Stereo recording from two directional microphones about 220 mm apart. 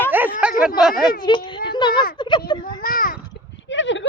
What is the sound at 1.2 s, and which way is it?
Speech, 20° left (ahead or behind).